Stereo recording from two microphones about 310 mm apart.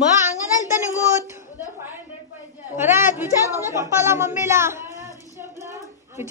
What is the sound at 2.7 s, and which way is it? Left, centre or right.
A woman's voice, centre.